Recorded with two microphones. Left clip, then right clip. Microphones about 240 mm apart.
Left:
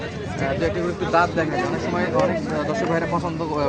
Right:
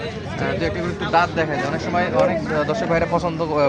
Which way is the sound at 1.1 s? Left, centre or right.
Right.